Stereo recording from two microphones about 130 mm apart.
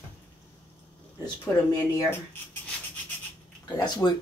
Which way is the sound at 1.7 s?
20° left (ahead or behind).